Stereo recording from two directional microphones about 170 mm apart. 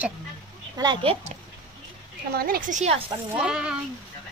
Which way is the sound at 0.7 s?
25° right (ahead or behind).